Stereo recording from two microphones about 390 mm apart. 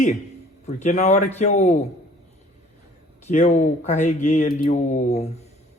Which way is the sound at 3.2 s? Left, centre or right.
Centre.